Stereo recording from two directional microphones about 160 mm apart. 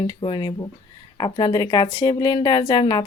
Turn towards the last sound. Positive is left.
turn(degrees=25)  # may be behind; listen again after turning